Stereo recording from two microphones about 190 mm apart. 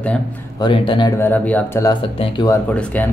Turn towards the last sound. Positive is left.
turn(degrees=5)  # may be behind; listen again after turning